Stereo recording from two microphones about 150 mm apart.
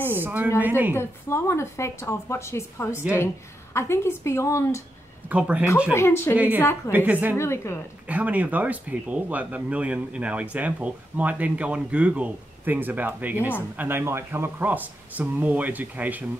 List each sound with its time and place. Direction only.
0.2 s speech: 15° right (ahead or behind)
0.9 s a woman's voice: 15° left (ahead or behind)
5.3 s speech: 10° right (ahead or behind)
5.9 s a woman's voice: 15° left (ahead or behind)
6.3 s speech: 10° right (ahead or behind)
7.3 s a woman's voice: 20° left (ahead or behind)
8.1 s speech: 10° right (ahead or behind)